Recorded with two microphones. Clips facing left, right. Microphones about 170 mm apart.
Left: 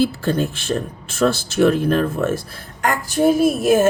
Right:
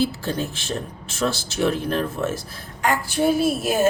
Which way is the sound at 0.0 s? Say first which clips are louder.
Left 5 dB; 55° left (ahead or behind).